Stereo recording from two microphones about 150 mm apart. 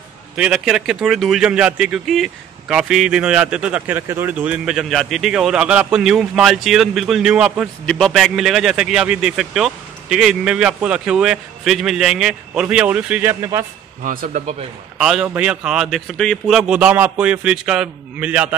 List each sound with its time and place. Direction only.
0.4 s a man's voice: 5° right (ahead or behind)
14.0 s speech: 75° right (ahead or behind)
15.0 s a man's voice: 5° right (ahead or behind)